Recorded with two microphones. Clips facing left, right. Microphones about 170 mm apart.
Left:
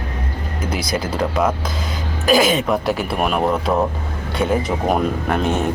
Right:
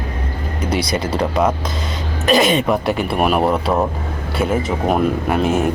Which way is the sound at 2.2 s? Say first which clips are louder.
Right 1 dB; centre (ahead or behind).